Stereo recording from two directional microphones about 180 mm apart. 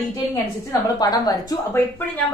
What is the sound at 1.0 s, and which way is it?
A woman's voice, 20° left (ahead or behind).